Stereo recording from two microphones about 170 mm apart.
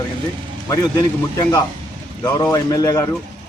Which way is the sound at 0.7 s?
20° left (ahead or behind).